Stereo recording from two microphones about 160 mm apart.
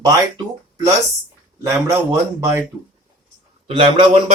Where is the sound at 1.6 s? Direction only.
20° right (ahead or behind).